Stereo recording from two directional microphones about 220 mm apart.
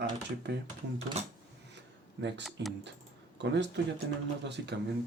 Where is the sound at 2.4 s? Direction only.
Centre (ahead or behind).